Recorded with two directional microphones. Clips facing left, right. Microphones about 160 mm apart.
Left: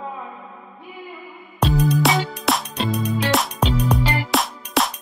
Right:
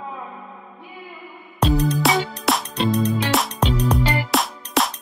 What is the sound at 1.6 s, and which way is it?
Music, 10° left (ahead or behind).